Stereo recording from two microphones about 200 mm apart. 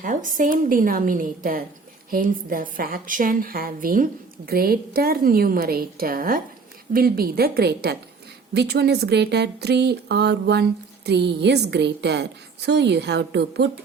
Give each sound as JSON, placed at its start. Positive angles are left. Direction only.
{"t": 0.0, "sound": "a woman's voice", "side_deg": -40}